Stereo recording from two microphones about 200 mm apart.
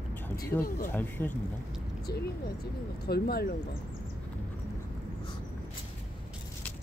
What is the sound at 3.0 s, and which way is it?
Speech, 50° left (ahead or behind).